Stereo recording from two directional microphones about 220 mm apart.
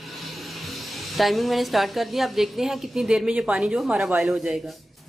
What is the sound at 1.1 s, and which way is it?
A woman's voice, centre (ahead or behind).